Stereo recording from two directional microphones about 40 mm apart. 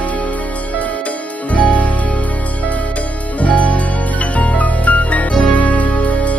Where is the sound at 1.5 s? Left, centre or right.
Left.